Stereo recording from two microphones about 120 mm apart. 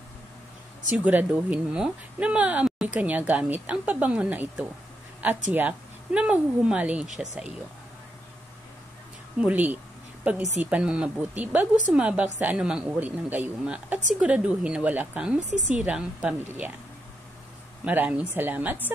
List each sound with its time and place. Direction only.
0.8 s speech: 10° right (ahead or behind)
9.4 s speech: 15° right (ahead or behind)
15.5 s a woman's voice: 90° right
15.8 s speech: 10° right (ahead or behind)
17.8 s speech: 10° right (ahead or behind)